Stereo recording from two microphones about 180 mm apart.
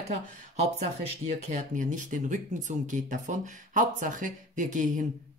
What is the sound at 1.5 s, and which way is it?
Speech, 45° right (ahead or behind).